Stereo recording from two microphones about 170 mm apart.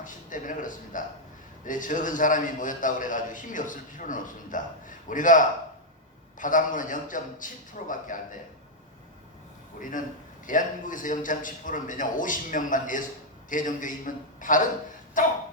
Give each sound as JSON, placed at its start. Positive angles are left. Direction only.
{"t": 0.0, "sound": "a man's voice", "side_deg": 50}
{"t": 9.8, "sound": "a man's voice", "side_deg": 50}